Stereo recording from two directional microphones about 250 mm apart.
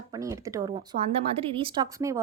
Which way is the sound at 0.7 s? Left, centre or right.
Right.